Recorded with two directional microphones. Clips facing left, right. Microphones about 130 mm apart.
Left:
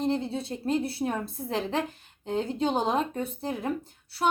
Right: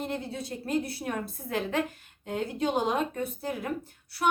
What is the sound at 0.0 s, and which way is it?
A woman's voice, 25° left (ahead or behind).